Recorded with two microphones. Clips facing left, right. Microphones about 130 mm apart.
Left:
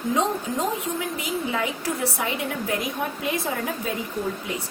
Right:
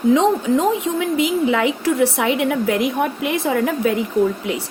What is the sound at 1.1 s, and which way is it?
A woman's voice, 85° right.